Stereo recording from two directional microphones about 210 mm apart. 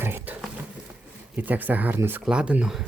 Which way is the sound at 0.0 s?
10° right (ahead or behind).